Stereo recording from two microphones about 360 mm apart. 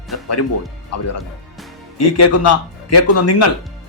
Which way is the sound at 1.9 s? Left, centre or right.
Left.